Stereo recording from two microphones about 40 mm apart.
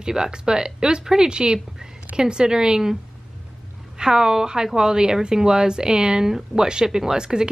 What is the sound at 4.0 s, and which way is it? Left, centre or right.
A woman's voice, centre.